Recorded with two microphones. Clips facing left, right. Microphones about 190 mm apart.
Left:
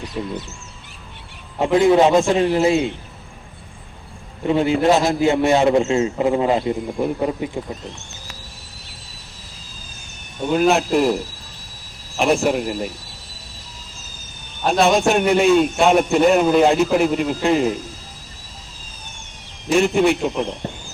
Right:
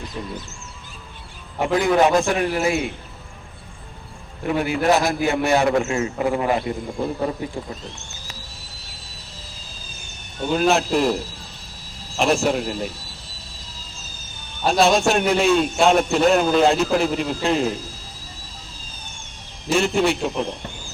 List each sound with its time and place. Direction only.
0.2 s speech: 10° left (ahead or behind)
1.5 s a man's voice: 25° left (ahead or behind)
4.4 s a man's voice: 25° left (ahead or behind)
10.4 s a man's voice: centre (ahead or behind)
14.6 s a man's voice: centre (ahead or behind)
19.9 s a man's voice: 5° left (ahead or behind)